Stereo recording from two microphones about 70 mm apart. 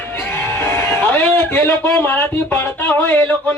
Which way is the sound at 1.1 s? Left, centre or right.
Left.